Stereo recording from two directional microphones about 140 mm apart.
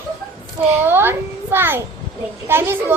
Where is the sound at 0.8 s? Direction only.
15° right (ahead or behind).